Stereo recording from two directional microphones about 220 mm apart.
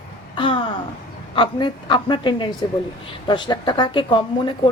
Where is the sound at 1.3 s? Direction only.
20° left (ahead or behind).